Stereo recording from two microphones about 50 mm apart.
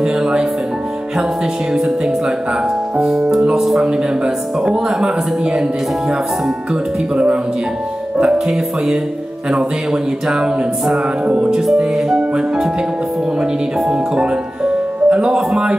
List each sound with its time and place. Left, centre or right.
0.0 s speech: centre
1.7 s speech: centre
3.8 s speech: centre
10.2 s speech: centre
11.2 s music: right
11.6 s speech: centre
13.7 s speech: centre